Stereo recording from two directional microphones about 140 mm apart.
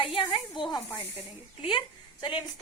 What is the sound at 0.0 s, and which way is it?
Snake, 40° left (ahead or behind).